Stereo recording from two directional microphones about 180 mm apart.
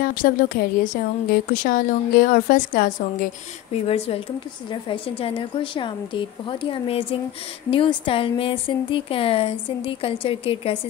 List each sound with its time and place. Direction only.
0.0 s a woman's voice: 50° left (ahead or behind)
3.7 s speech: 35° left (ahead or behind)